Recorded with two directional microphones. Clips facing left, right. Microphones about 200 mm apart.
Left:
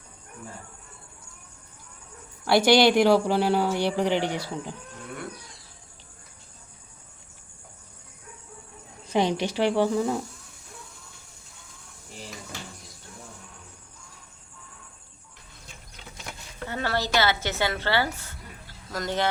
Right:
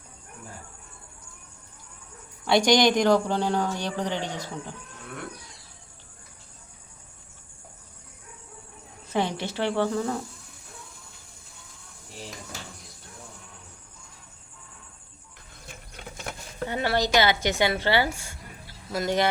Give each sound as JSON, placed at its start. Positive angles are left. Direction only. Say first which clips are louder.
{"t": 2.4, "sound": "speech", "louder": "left 2 dB", "side_deg": 5}
{"t": 9.0, "sound": "speech", "louder": "left 3 dB", "side_deg": 15}
{"t": 15.6, "sound": "a sound", "louder": "right 5 dB", "side_deg": -55}
{"t": 16.6, "sound": "a woman's voice", "louder": "right 3 dB", "side_deg": -15}